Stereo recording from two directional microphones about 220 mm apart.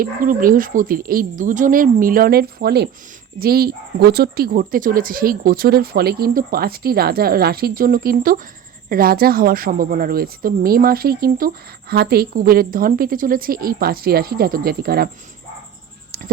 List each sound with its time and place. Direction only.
0.0 s speech: 40° right (ahead or behind)